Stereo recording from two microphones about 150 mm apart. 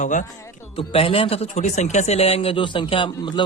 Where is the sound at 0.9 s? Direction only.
40° left (ahead or behind).